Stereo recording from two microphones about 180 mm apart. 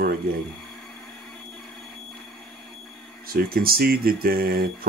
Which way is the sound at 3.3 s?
55° right (ahead or behind).